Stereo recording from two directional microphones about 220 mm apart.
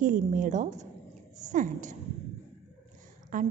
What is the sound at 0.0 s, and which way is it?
A woman's voice, 35° right (ahead or behind).